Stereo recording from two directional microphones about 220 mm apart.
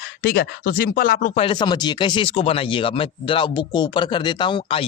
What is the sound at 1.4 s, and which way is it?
Speech, 20° left (ahead or behind).